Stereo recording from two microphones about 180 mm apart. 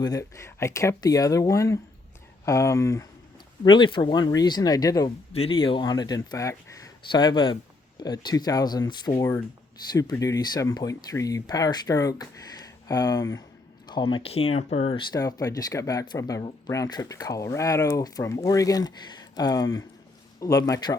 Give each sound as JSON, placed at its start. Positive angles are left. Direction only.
{"t": 0.0, "sound": "speech", "side_deg": 20}
{"t": 3.6, "sound": "speech", "side_deg": 25}
{"t": 5.3, "sound": "speech", "side_deg": 30}